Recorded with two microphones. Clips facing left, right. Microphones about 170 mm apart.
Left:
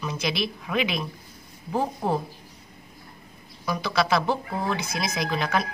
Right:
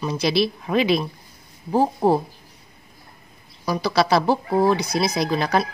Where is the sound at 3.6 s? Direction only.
35° right (ahead or behind).